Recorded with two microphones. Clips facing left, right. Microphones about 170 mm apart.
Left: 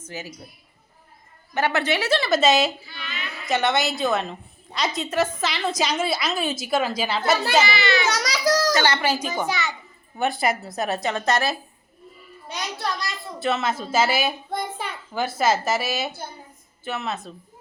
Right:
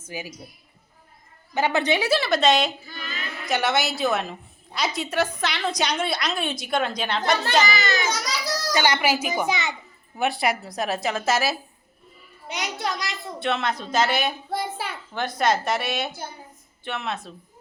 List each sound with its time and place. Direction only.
0.0 s a woman's voice: 10° right (ahead or behind)
1.5 s a woman's voice: 15° right (ahead or behind); by 2.7 s 5° left (ahead or behind)
2.8 s a sound: 45° right (ahead or behind)
3.4 s a woman's voice: centre (ahead or behind)
7.7 s baby cry: 40° right (ahead or behind)
8.0 s a sound: 85° left
8.7 s a woman's voice: 15° right (ahead or behind)
10.2 s a woman's voice: centre (ahead or behind)
12.5 s a child's voice: 20° right (ahead or behind)
13.4 s a woman's voice: centre (ahead or behind)
14.5 s a sound: 5° right (ahead or behind)
15.1 s a woman's voice: 5° left (ahead or behind)